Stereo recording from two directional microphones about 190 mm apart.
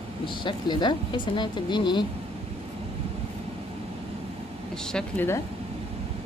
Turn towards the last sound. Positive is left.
turn(degrees=10)  # may be behind; listen again after turning